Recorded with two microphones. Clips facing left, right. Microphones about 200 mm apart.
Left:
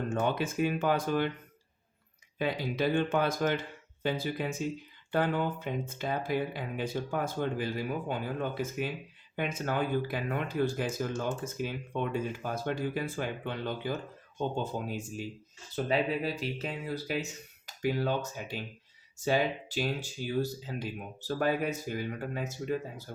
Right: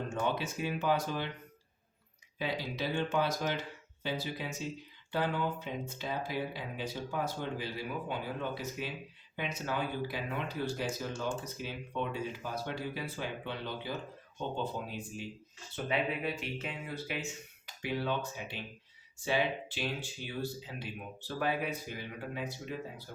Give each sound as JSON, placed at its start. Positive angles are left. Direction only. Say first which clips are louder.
{"t": 0.1, "sound": "speech", "louder": "left 3 dB", "side_deg": 50}
{"t": 2.4, "sound": "speech", "louder": "left 6 dB", "side_deg": 50}